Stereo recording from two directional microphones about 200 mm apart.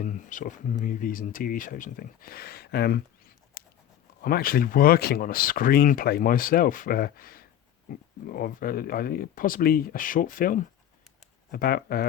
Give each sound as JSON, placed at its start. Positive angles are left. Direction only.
{"t": 0.0, "sound": "speech", "side_deg": 40}
{"t": 3.6, "sound": "a sound", "side_deg": 50}
{"t": 4.2, "sound": "speech", "side_deg": 45}